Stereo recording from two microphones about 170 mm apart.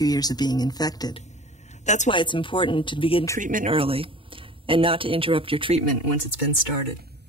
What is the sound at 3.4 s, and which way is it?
Speech, 50° right (ahead or behind).